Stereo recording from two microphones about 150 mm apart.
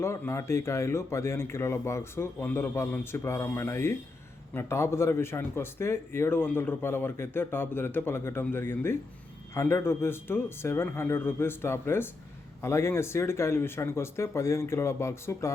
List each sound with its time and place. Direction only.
0.0 s speech: 20° left (ahead or behind)